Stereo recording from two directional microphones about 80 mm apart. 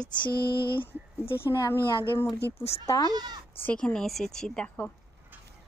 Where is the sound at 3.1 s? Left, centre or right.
Right.